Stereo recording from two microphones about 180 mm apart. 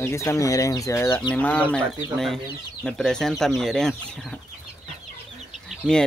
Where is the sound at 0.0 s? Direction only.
15° left (ahead or behind).